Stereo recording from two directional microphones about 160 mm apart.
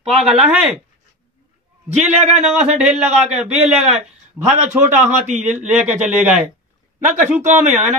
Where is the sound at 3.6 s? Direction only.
40° right (ahead or behind).